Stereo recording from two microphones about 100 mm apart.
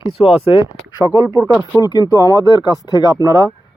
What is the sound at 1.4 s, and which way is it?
Speech, 15° right (ahead or behind).